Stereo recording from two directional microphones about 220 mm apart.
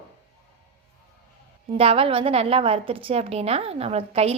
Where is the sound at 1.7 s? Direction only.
25° right (ahead or behind).